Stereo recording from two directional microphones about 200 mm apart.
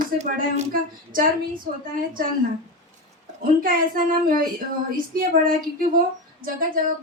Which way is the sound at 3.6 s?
45° right (ahead or behind).